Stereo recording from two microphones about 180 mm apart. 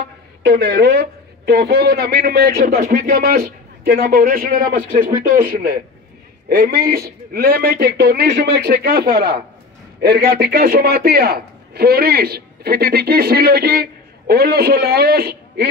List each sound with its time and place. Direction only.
0.4 s a man's voice: 65° right (ahead or behind)
6.5 s a man's voice: 65° right (ahead or behind)